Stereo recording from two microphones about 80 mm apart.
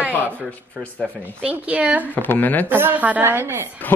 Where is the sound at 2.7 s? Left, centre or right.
Right.